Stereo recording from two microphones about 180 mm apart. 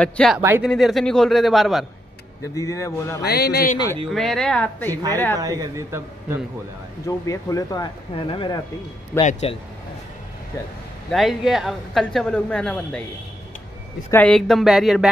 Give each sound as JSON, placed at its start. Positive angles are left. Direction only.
{"t": 0.0, "sound": "a man's voice", "side_deg": 5}
{"t": 0.4, "sound": "a man's voice", "side_deg": -10}
{"t": 0.7, "sound": "a man's voice", "side_deg": 0}
{"t": 2.4, "sound": "speech", "side_deg": 20}
{"t": 3.2, "sound": "speech", "side_deg": 60}
{"t": 4.1, "sound": "a man's voice", "side_deg": 0}
{"t": 5.4, "sound": "a man's voice", "side_deg": -20}
{"t": 7.1, "sound": "speech", "side_deg": 20}
{"t": 9.2, "sound": "speech", "side_deg": 40}
{"t": 11.1, "sound": "a man's voice", "side_deg": 0}
{"t": 14.1, "sound": "a man's voice", "side_deg": 5}